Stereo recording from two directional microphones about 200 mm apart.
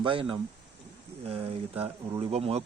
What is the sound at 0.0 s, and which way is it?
Speech, 25° right (ahead or behind).